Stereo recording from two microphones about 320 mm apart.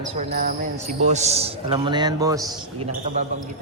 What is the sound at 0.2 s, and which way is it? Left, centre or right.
Jingle bell, right.